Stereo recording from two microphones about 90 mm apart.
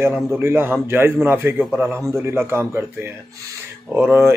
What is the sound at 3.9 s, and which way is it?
Speech, 25° right (ahead or behind).